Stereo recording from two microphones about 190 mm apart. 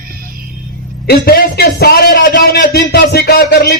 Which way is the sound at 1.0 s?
55° left (ahead or behind).